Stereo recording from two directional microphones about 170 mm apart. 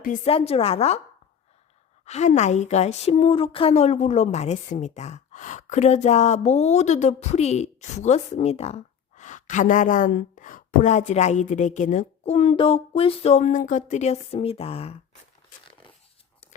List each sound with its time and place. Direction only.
0.3 s speech: 35° left (ahead or behind)
2.0 s speech: 40° left (ahead or behind)